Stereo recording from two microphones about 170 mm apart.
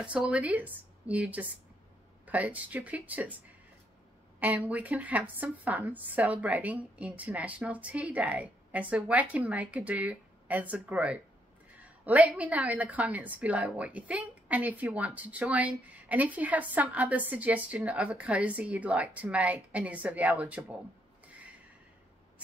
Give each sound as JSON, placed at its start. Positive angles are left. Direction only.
{"t": 0.0, "sound": "a woman's voice", "side_deg": -5}
{"t": 4.4, "sound": "a woman's voice", "side_deg": -10}